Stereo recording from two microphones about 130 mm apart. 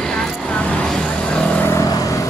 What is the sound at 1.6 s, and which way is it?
Vehicle, 25° left (ahead or behind).